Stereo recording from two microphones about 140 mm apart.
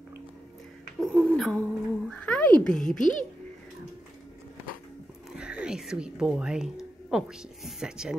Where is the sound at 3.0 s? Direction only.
65° left (ahead or behind).